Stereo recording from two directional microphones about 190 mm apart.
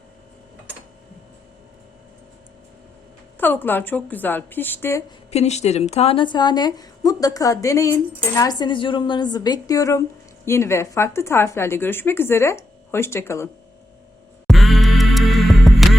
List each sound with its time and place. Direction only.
3.3 s speech: 10° left (ahead or behind)
5.3 s a woman's voice: 35° left (ahead or behind); by 13.5 s 15° left (ahead or behind)
14.4 s music: centre (ahead or behind)